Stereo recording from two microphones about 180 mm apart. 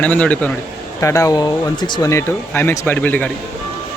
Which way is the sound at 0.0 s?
10° left (ahead or behind).